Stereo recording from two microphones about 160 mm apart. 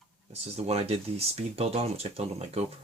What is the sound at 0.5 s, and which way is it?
Speech, 40° right (ahead or behind).